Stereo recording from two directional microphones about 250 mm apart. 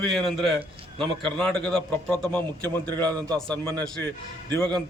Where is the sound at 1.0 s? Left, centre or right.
Centre.